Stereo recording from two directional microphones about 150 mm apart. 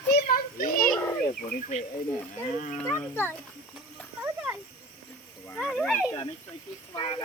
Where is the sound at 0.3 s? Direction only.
70° left (ahead or behind).